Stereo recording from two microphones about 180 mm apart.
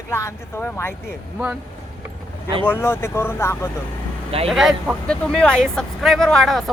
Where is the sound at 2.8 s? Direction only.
15° left (ahead or behind).